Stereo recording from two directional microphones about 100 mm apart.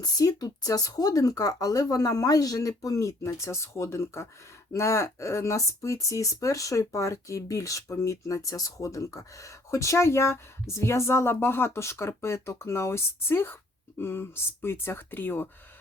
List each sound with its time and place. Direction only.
0.0 s speech: 40° left (ahead or behind); by 15.4 s 20° left (ahead or behind)